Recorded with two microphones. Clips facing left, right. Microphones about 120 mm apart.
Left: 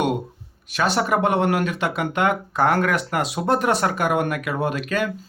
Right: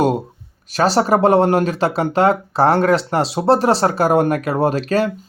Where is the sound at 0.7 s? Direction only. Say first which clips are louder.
Right 6 dB; 35° right (ahead or behind).